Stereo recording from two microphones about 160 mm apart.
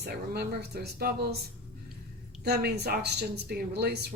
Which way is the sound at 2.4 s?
85° right.